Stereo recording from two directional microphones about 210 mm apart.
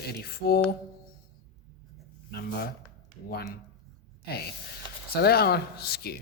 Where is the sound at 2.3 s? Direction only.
50° left (ahead or behind).